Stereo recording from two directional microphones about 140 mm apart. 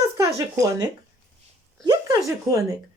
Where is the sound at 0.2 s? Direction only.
25° right (ahead or behind).